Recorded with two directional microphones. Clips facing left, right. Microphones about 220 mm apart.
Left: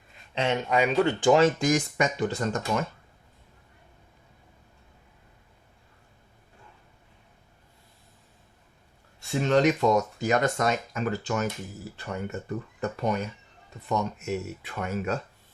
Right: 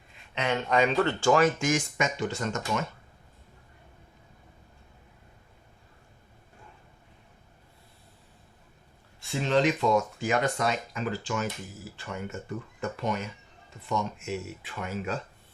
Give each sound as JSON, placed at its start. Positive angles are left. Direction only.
{"t": 0.5, "sound": "speech", "side_deg": 10}
{"t": 9.4, "sound": "speech", "side_deg": 45}